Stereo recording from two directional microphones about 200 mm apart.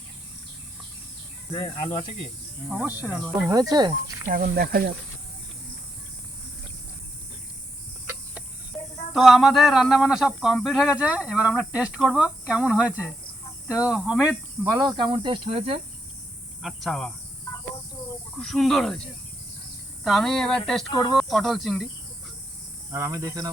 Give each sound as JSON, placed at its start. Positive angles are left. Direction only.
{"t": 2.6, "sound": "speech", "side_deg": -5}
{"t": 3.5, "sound": "speech", "side_deg": -20}
{"t": 4.3, "sound": "speech", "side_deg": -45}
{"t": 9.1, "sound": "speech", "side_deg": 0}
{"t": 16.6, "sound": "speech", "side_deg": 0}
{"t": 18.3, "sound": "speech", "side_deg": 0}
{"t": 20.1, "sound": "speech", "side_deg": 0}
{"t": 22.9, "sound": "speech", "side_deg": -15}